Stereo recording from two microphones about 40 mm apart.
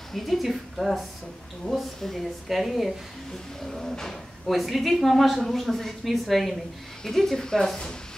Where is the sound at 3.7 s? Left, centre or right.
Centre.